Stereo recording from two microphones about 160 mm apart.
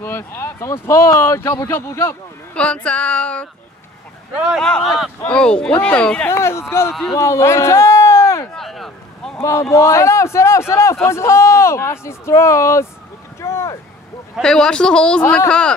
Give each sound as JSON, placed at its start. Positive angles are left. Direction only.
{"t": 0.0, "sound": "speech", "side_deg": 15}
{"t": 4.5, "sound": "speech", "side_deg": 5}
{"t": 6.9, "sound": "speech", "side_deg": 0}
{"t": 7.2, "sound": "a sound", "side_deg": 15}
{"t": 8.5, "sound": "a sound", "side_deg": 0}
{"t": 9.4, "sound": "speech", "side_deg": 15}
{"t": 13.4, "sound": "vehicle", "side_deg": 15}
{"t": 14.3, "sound": "speech", "side_deg": 5}